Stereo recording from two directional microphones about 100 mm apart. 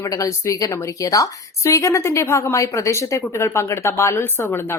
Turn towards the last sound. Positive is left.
turn(degrees=25)  # may be behind; listen again after turning